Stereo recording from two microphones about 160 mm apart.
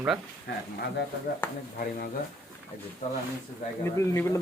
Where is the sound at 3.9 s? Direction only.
15° left (ahead or behind).